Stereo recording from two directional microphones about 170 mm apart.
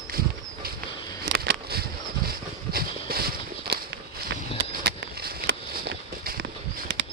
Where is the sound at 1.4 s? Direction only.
70° right (ahead or behind).